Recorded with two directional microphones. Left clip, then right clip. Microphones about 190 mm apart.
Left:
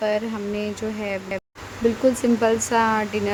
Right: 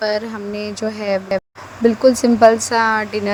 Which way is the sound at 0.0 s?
25° right (ahead or behind).